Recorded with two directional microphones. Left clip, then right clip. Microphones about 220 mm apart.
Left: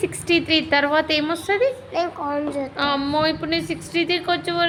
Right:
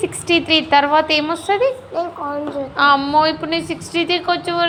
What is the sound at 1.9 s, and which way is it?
Speech, 30° left (ahead or behind).